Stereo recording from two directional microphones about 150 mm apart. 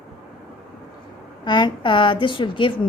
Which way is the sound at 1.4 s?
30° left (ahead or behind).